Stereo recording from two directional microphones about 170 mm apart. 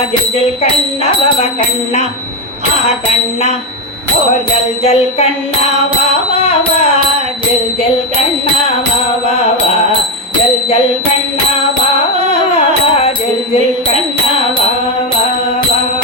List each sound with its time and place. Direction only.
4.8 s music: 35° left (ahead or behind)